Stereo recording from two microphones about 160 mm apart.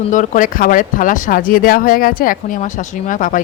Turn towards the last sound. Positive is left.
turn(degrees=55)  # may be behind; listen again after turning